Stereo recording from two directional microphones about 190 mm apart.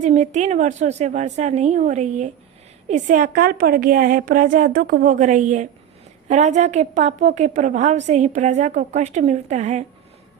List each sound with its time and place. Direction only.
0.0 s a woman's voice: 40° right (ahead or behind)